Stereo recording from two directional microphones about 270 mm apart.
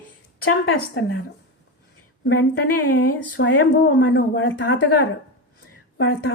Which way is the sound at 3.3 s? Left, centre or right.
Left.